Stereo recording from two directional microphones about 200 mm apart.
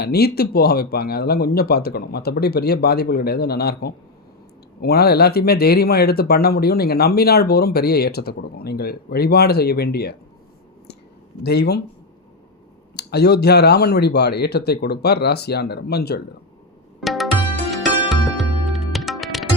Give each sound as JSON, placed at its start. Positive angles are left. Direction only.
{"t": 0.0, "sound": "speech", "side_deg": 50}
{"t": 11.4, "sound": "speech", "side_deg": 55}
{"t": 13.0, "sound": "speech", "side_deg": 55}
{"t": 17.0, "sound": "music", "side_deg": 0}